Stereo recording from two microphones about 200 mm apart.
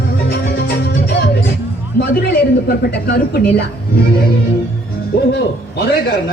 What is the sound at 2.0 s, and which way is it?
A man's voice, 55° left (ahead or behind).